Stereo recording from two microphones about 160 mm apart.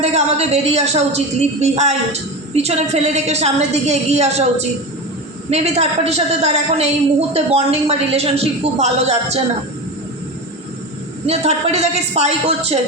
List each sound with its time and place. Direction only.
0.0 s a woman's voice: 40° right (ahead or behind)
5.5 s a woman's voice: 40° right (ahead or behind)
11.3 s a woman's voice: 40° right (ahead or behind)